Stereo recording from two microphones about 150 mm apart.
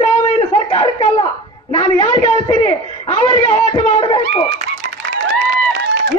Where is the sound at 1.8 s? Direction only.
35° left (ahead or behind).